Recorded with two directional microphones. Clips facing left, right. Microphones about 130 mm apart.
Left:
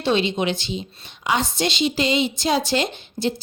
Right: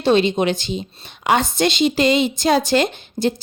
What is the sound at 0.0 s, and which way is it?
A woman's voice, 45° right (ahead or behind).